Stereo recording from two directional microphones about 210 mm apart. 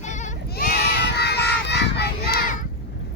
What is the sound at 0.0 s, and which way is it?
Sheep, 35° left (ahead or behind).